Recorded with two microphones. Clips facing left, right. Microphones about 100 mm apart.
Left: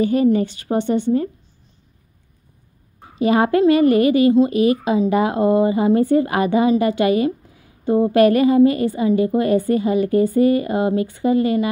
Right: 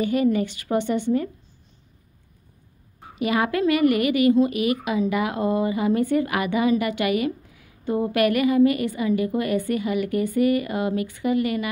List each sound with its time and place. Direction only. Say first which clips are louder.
0.0 s a woman's voice: left 5 dB; 35° left (ahead or behind)
3.2 s a woman's voice: left 7 dB; 35° left (ahead or behind)